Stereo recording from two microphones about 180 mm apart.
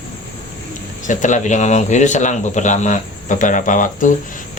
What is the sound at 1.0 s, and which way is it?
Speech, 45° left (ahead or behind).